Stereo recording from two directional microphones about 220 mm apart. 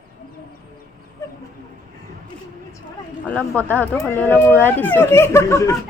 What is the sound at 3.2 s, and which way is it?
Speech, 5° left (ahead or behind).